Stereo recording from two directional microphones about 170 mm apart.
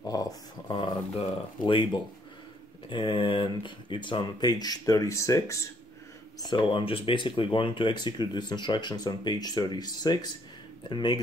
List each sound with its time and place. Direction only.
0.0 s speech: 20° left (ahead or behind)
6.4 s speech: 30° left (ahead or behind)